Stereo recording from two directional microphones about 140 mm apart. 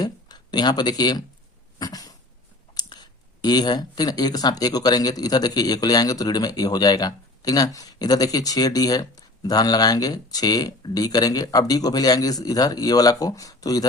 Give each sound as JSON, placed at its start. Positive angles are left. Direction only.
{"t": 0.0, "sound": "speech", "side_deg": 30}
{"t": 1.8, "sound": "a sound", "side_deg": 25}
{"t": 2.7, "sound": "speech", "side_deg": 30}